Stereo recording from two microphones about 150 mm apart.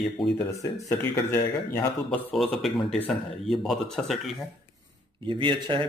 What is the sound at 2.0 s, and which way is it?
Speech, 5° left (ahead or behind).